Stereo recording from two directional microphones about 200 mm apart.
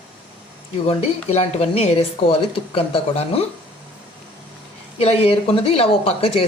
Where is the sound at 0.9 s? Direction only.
30° left (ahead or behind).